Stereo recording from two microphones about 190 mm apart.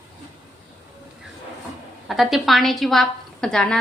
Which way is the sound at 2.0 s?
Centre (ahead or behind).